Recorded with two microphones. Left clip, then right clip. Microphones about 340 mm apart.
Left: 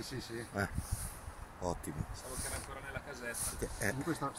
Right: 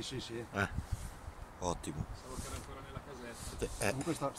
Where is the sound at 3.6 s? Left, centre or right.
Centre.